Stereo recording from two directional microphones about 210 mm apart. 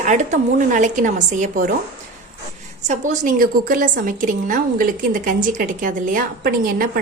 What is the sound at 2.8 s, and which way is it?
A woman's voice, 35° right (ahead or behind).